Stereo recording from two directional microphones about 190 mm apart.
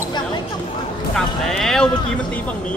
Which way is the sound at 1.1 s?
Centre (ahead or behind).